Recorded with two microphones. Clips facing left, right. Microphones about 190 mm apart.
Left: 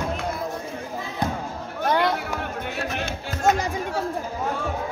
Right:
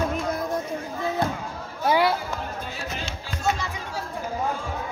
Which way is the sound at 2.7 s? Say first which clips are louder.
Left 5 dB; 60° left (ahead or behind).